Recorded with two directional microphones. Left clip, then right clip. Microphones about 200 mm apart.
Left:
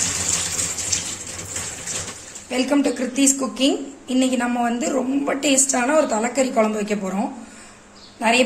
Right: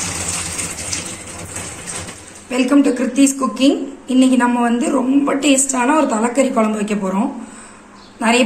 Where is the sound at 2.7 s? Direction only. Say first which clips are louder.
Right 7 dB; 25° left (ahead or behind).